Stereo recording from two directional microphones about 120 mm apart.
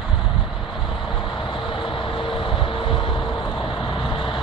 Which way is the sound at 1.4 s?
45° left (ahead or behind).